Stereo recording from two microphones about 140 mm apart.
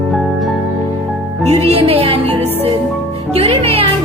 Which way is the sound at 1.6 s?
45° right (ahead or behind).